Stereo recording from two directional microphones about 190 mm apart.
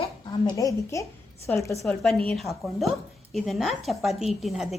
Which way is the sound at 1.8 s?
Centre (ahead or behind).